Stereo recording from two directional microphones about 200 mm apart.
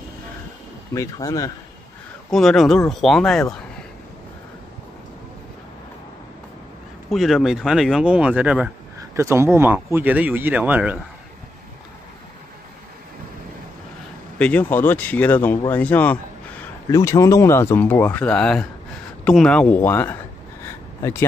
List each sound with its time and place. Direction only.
0.9 s speech: 15° left (ahead or behind)
2.3 s speech: centre (ahead or behind)
7.1 s speech: centre (ahead or behind)
14.4 s speech: 10° left (ahead or behind)